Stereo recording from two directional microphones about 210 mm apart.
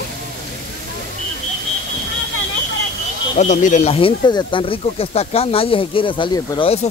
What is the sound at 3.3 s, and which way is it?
Speech, 35° left (ahead or behind).